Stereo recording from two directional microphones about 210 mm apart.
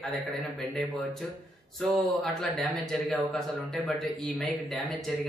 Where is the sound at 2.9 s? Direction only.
Centre (ahead or behind).